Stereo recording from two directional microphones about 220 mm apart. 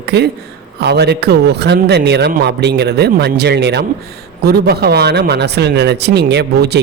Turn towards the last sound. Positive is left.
turn(degrees=-50)  # may be behind; listen again after turning